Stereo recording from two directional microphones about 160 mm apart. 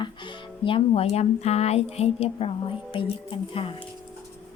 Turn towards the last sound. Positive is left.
turn(degrees=35)  # may be behind; listen again after turning